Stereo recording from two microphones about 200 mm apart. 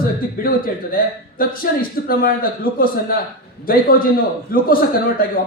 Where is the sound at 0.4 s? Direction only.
45° left (ahead or behind).